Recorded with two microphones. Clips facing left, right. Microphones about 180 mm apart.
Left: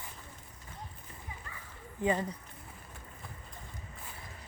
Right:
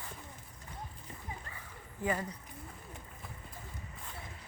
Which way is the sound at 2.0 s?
25° left (ahead or behind).